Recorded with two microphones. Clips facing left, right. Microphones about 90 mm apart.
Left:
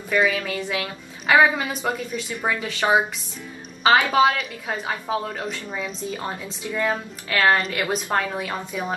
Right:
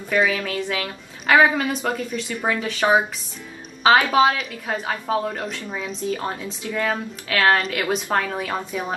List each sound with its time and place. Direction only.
0.1 s a woman's voice: centre (ahead or behind)
3.8 s a woman's voice: centre (ahead or behind)